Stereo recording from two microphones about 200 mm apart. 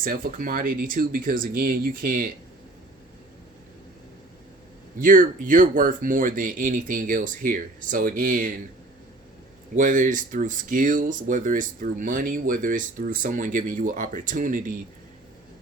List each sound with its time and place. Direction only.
0.0 s speech: 45° right (ahead or behind)
4.9 s speech: 45° right (ahead or behind)
9.7 s speech: 40° right (ahead or behind)